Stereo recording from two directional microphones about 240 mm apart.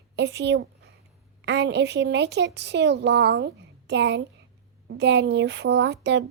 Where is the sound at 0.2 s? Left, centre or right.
Right.